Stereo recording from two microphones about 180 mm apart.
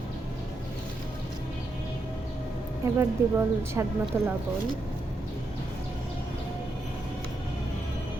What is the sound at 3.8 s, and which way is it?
Speech, 15° right (ahead or behind).